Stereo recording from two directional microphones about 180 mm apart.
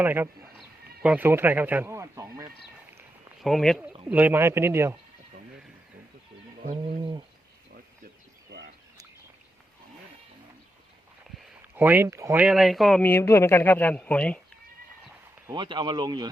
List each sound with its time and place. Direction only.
0.0 s speech: 10° right (ahead or behind)
3.4 s speech: centre (ahead or behind); by 4.9 s 15° right (ahead or behind)
11.4 s speech: 10° right (ahead or behind); by 14.3 s 5° left (ahead or behind)
15.4 s speech: 25° right (ahead or behind)